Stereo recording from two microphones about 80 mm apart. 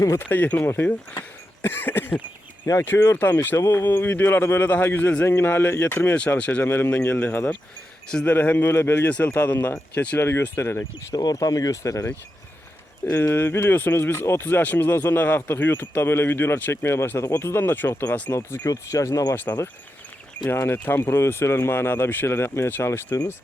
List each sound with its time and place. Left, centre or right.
0.2 s speech: left
10.2 s speech: left
11.1 s speech: left
13.1 s speech: left
18.6 s speech: left
20.5 s speech: left